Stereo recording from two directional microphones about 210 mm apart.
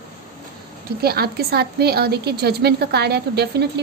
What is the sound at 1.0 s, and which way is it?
A woman's voice, 50° right (ahead or behind).